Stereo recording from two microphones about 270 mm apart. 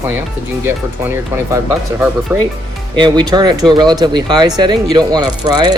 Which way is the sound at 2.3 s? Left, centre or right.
Centre.